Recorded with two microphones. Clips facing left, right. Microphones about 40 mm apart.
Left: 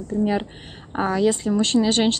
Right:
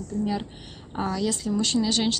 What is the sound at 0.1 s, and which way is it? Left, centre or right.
Speech, left.